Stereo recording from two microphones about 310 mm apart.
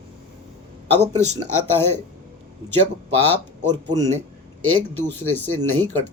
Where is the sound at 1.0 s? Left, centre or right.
Right.